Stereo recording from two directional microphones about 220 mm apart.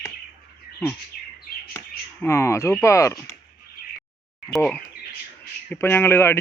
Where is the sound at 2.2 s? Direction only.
15° left (ahead or behind).